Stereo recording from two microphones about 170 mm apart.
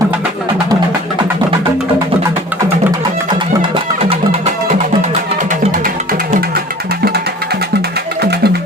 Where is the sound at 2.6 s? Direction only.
25° right (ahead or behind).